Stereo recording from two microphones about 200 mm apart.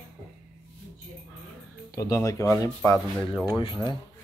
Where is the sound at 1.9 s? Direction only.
15° left (ahead or behind).